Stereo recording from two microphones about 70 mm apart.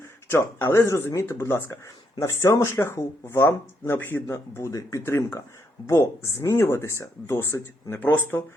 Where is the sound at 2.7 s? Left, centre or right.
Left.